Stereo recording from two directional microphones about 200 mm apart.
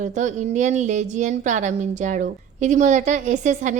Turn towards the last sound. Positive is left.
turn(degrees=-35)  # may be behind; listen again after turning